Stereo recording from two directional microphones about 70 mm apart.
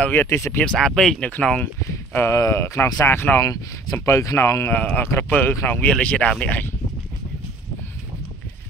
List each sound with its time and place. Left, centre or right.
0.1 s speech: left
0.7 s speech: centre
1.9 s speech: left
3.4 s speech: left
4.7 s speech: left
5.9 s speech: centre